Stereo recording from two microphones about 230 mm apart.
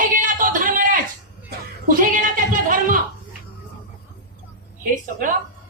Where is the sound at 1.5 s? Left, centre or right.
Right.